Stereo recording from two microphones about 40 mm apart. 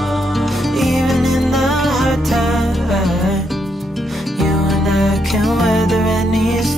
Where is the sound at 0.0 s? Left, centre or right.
Centre.